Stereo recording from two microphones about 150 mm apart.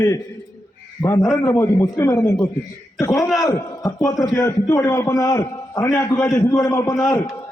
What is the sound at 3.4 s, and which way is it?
A man's voice, 25° left (ahead or behind).